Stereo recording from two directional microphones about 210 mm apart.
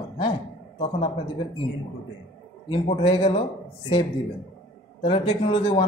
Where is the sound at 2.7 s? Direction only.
25° left (ahead or behind).